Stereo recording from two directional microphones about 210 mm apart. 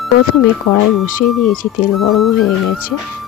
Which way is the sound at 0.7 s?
45° left (ahead or behind).